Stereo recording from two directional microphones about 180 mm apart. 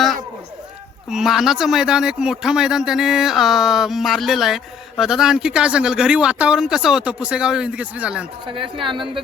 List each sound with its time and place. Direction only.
1.1 s speech: centre (ahead or behind)
8.5 s speech: 30° right (ahead or behind)